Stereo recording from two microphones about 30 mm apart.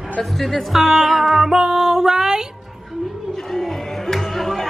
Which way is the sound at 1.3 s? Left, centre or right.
Centre.